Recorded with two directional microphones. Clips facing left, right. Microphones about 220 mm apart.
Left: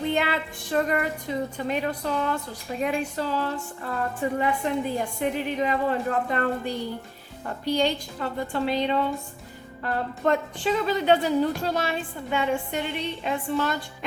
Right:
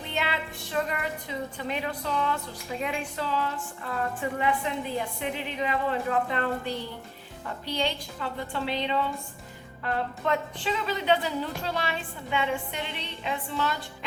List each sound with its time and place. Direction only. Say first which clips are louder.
0.1 s a woman's voice: left 6 dB; 50° left (ahead or behind)